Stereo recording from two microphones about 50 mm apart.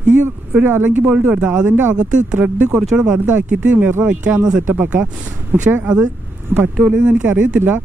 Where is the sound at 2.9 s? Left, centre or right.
Centre.